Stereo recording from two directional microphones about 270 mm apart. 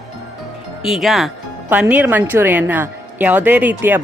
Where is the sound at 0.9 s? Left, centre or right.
Centre.